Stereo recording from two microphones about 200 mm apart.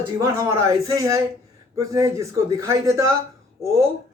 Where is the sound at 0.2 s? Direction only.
15° right (ahead or behind).